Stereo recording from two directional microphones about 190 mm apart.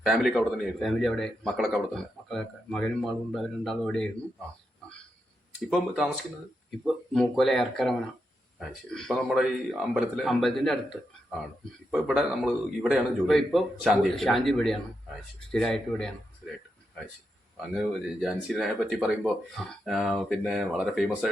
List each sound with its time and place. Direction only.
0.0 s speech: centre (ahead or behind)
5.5 s speech: centre (ahead or behind)
18.2 s speech: centre (ahead or behind)